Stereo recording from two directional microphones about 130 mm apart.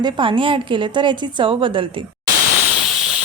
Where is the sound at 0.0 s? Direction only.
40° right (ahead or behind).